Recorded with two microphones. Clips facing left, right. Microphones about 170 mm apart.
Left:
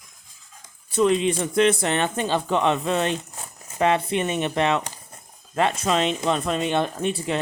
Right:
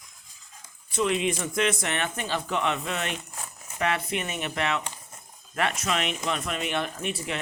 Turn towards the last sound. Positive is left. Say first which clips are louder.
# left 7 dB
turn(degrees=30)  # may be behind; listen again after turning